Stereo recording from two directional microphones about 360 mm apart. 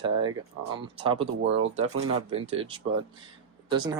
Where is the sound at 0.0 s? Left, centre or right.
Centre.